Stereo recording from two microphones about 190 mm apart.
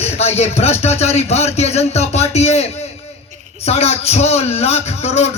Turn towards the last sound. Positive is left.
turn(degrees=35)  # may be behind; listen again after turning